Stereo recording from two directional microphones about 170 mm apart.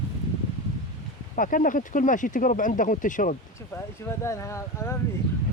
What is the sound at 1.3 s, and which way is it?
Speech, 50° left (ahead or behind).